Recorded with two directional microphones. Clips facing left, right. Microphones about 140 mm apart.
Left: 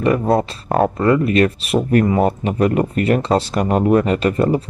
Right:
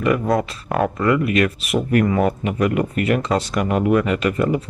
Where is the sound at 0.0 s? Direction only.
30° left (ahead or behind).